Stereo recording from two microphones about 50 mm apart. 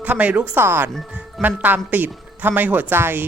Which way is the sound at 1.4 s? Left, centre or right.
Right.